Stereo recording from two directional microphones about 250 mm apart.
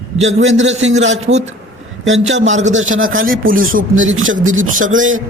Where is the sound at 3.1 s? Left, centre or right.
Right.